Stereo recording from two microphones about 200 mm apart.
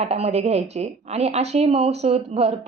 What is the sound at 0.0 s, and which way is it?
Speech, 30° right (ahead or behind).